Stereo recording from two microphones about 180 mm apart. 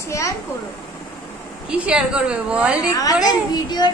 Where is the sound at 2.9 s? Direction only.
20° left (ahead or behind).